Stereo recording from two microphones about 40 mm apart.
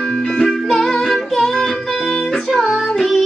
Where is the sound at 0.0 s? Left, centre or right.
Centre.